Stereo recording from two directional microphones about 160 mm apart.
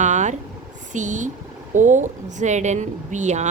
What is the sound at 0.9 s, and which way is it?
Speech, 50° right (ahead or behind).